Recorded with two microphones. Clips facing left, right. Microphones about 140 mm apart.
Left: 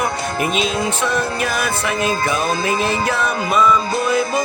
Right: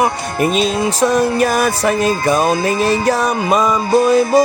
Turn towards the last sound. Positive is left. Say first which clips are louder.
# right 7 dB
turn(degrees=-35)  # may be behind; listen again after turning